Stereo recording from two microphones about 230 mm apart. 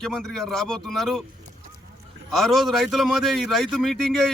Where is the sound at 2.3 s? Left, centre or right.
Centre.